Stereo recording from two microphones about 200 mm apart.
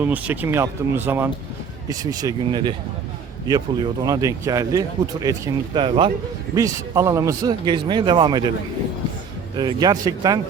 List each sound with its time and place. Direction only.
0.0 s speech: 10° right (ahead or behind); by 6.1 s 25° right (ahead or behind)
6.5 s speech: 15° right (ahead or behind)
9.6 s speech: 20° right (ahead or behind)